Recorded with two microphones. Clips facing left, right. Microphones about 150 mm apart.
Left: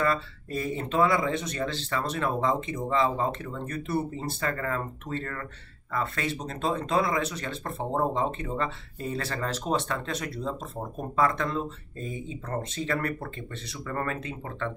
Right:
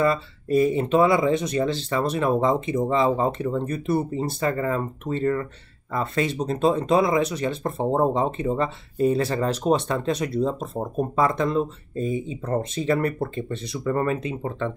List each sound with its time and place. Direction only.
0.0 s speech: 15° right (ahead or behind)